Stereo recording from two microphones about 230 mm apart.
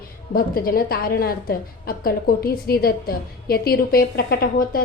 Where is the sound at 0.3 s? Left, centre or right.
Left.